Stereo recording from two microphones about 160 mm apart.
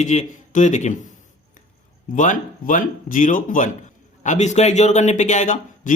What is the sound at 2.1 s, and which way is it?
A man's voice, 55° left (ahead or behind).